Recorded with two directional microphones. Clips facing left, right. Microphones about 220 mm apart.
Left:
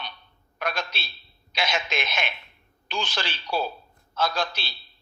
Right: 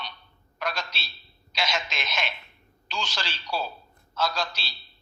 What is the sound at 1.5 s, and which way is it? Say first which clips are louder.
Radio: left 3 dB; 55° left (ahead or behind).